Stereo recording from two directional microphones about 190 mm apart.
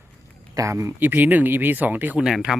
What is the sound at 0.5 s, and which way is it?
Speech, 15° right (ahead or behind).